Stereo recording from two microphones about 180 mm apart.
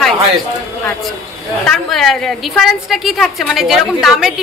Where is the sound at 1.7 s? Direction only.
Centre (ahead or behind).